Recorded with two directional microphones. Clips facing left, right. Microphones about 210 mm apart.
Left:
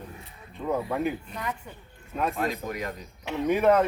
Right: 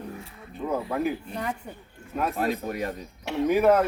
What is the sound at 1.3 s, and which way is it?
A man's voice, 30° right (ahead or behind).